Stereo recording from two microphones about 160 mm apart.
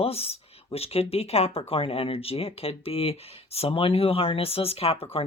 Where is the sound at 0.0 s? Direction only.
40° left (ahead or behind).